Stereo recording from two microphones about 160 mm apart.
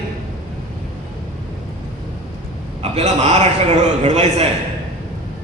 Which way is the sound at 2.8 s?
45° right (ahead or behind).